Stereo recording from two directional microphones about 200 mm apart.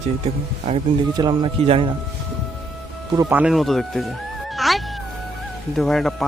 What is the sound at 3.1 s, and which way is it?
Speech, 10° right (ahead or behind).